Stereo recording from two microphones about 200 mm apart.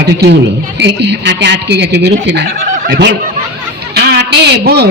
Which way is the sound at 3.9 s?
55° right (ahead or behind).